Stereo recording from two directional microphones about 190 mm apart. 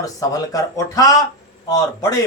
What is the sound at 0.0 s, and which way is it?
A man's voice, 20° left (ahead or behind).